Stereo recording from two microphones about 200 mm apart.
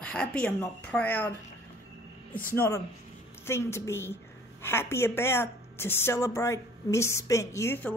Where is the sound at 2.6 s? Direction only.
15° left (ahead or behind).